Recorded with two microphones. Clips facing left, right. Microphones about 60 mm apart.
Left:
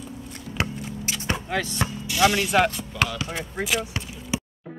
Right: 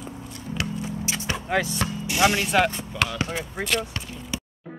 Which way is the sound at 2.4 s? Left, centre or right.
Centre.